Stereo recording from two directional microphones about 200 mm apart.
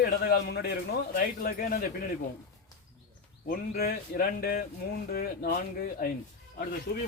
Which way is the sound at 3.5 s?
50° left (ahead or behind).